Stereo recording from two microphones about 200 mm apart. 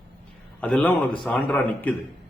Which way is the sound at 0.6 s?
5° left (ahead or behind).